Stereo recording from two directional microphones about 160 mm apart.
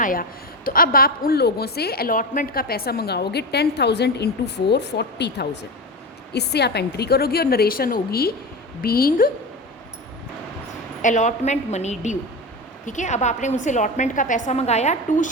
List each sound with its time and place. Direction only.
0.0 s a woman's voice: 60° left (ahead or behind)
11.0 s a woman's voice: 50° left (ahead or behind)